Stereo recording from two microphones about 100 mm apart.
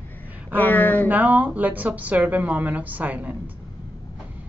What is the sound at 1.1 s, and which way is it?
A woman's voice, 15° right (ahead or behind).